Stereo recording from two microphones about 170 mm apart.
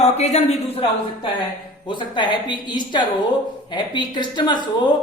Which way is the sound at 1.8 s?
30° left (ahead or behind).